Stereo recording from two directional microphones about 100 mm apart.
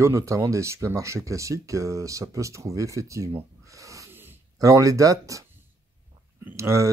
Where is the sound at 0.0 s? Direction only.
30° right (ahead or behind).